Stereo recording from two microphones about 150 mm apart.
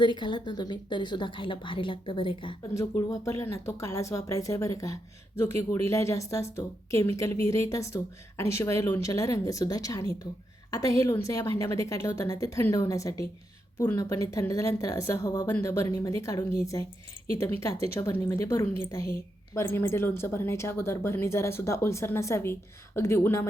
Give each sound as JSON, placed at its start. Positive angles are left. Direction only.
{"t": 0.0, "sound": "a woman's voice", "side_deg": 30}
{"t": 2.7, "sound": "a woman's voice", "side_deg": 20}